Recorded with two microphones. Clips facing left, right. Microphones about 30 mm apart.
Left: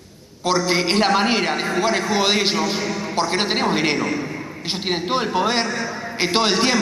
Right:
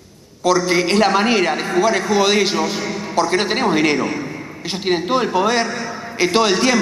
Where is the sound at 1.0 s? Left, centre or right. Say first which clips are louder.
Right 2 dB; centre.